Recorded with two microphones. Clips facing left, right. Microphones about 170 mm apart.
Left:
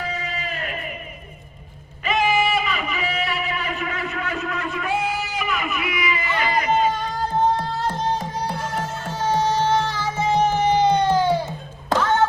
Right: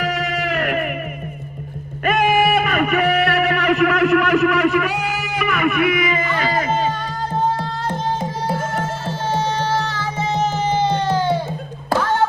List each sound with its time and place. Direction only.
0.0 s music: 90° right
2.0 s music: 55° right (ahead or behind); by 6.8 s 40° right (ahead or behind)
8.4 s music: 45° right (ahead or behind)
10.7 s music: 15° left (ahead or behind)